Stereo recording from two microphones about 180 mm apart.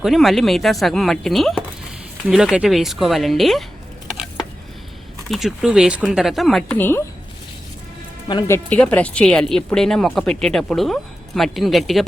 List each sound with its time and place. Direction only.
0.0 s speech: centre (ahead or behind)
5.3 s speech: centre (ahead or behind)
8.4 s speech: 10° left (ahead or behind)